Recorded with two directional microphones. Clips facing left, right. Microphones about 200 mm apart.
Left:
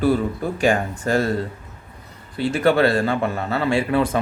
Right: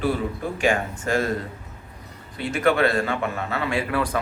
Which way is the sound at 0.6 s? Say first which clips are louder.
Left 3 dB; 35° left (ahead or behind).